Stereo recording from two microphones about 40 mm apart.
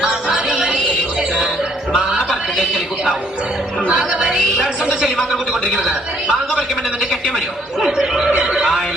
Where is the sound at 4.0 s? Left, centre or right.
Centre.